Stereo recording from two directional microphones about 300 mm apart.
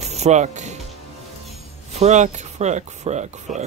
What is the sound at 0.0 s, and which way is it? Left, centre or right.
Mechanisms, right.